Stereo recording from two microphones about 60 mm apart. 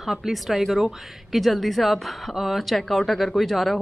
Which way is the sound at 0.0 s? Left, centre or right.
Centre.